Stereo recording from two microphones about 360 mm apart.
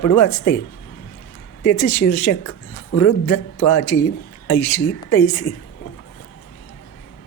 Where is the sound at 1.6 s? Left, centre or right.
Left.